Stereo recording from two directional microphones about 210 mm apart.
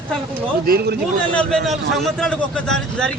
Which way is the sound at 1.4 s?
Centre (ahead or behind).